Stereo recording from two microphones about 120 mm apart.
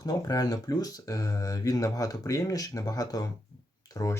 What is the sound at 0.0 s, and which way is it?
Speech, 30° left (ahead or behind).